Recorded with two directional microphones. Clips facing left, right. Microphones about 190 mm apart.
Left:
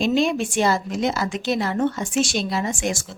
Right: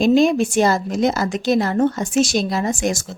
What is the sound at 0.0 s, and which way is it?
A woman's voice, 45° right (ahead or behind).